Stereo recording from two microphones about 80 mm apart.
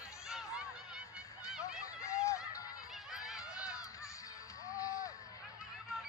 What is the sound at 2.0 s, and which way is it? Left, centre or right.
Run, left.